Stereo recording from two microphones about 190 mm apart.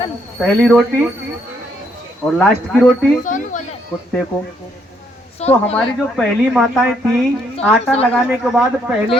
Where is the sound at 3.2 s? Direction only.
40° left (ahead or behind).